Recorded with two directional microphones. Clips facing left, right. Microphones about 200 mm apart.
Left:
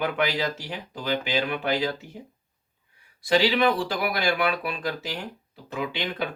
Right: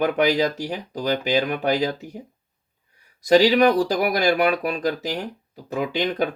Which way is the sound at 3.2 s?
40° right (ahead or behind).